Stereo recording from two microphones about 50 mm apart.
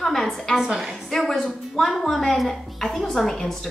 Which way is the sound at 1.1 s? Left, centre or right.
Centre.